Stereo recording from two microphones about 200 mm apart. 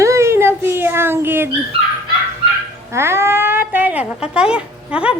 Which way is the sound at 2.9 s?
10° right (ahead or behind).